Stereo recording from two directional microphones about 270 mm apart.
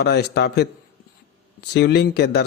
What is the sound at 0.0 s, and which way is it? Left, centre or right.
Speech, left.